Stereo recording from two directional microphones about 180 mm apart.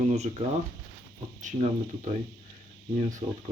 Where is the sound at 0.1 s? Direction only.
35° right (ahead or behind).